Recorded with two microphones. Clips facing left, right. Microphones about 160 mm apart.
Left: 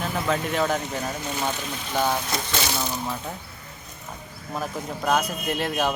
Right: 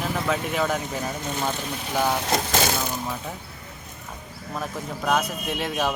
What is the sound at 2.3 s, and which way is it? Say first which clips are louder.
Speech: right 4 dB; 50° right (ahead or behind).